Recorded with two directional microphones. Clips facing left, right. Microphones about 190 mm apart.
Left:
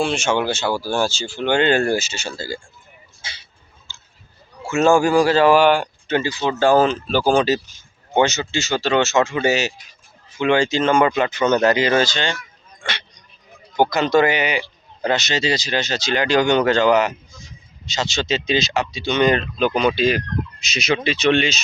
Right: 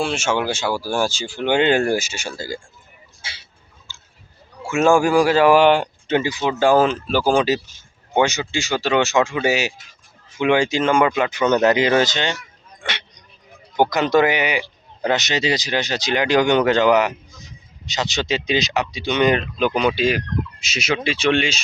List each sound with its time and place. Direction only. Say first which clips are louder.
0.0 s speech: left 1 dB; 5° right (ahead or behind)
3.2 s vehicle: even; 5° right (ahead or behind)
4.6 s speech: even; 15° right (ahead or behind)